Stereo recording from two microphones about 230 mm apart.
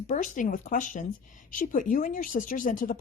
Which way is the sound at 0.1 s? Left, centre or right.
Left.